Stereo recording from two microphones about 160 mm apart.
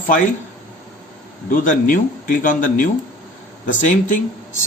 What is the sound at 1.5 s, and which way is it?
Speech, 60° left (ahead or behind).